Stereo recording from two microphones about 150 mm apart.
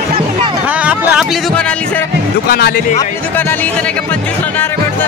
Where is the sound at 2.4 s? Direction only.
90° left.